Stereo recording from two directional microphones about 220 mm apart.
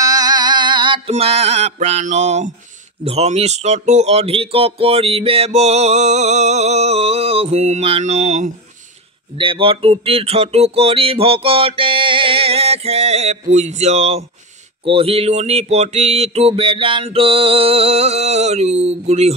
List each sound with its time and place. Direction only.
0.0 s mantra: 15° right (ahead or behind)
3.1 s speech: 30° right (ahead or behind)
9.4 s music: 25° right (ahead or behind)
14.9 s speech: 25° right (ahead or behind)